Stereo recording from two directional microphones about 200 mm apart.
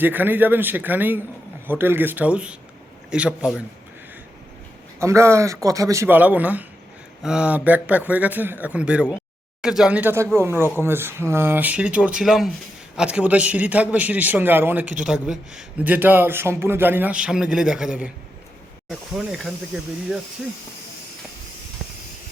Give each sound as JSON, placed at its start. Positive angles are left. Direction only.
{"t": 0.0, "sound": "a man's voice", "side_deg": -10}
{"t": 4.9, "sound": "a man's voice", "side_deg": -15}